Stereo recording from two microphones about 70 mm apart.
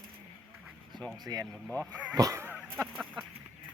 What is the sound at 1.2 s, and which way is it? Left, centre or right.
Speech, right.